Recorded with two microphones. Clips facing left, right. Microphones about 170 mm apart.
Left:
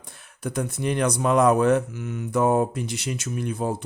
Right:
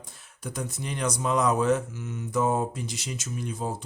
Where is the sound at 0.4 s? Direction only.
60° left (ahead or behind).